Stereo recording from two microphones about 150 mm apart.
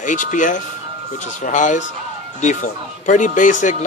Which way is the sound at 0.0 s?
60° left (ahead or behind).